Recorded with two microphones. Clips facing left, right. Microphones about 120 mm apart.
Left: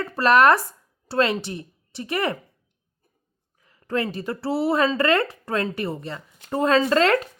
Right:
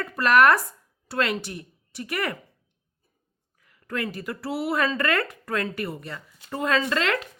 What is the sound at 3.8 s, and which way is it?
Speech, 30° left (ahead or behind).